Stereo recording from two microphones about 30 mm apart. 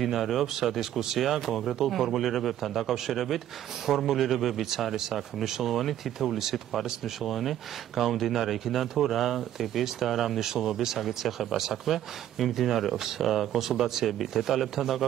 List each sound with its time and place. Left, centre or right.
0.0 s speech: centre